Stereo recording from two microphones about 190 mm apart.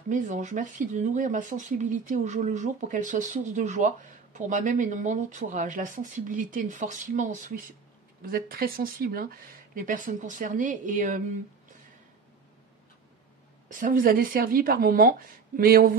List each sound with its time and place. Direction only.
0.1 s speech: 40° right (ahead or behind)
13.7 s speech: 45° right (ahead or behind)